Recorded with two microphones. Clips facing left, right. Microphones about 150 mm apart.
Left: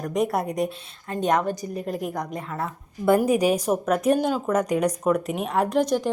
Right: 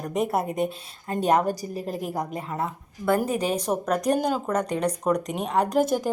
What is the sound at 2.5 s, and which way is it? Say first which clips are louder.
Speech: right 1 dB; 20° right (ahead or behind).